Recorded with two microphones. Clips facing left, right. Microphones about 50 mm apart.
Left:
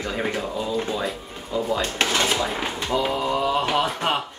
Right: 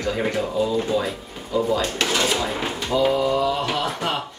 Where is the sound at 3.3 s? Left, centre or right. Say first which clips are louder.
Even; centre.